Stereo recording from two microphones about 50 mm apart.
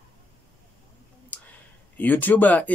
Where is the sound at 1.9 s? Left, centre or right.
Left.